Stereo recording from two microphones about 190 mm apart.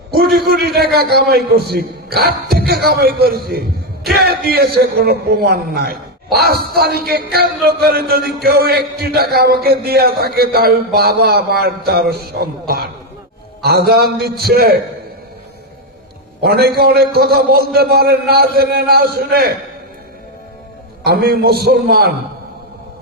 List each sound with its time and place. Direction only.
0.1 s a sound: 55° right (ahead or behind)
0.9 s a man's voice: 55° right (ahead or behind)
16.4 s a man's voice: 55° right (ahead or behind)
21.0 s a man's voice: 55° right (ahead or behind)